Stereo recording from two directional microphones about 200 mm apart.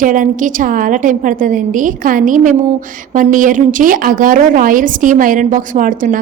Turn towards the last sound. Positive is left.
turn(degrees=-40)  # may be behind; listen again after turning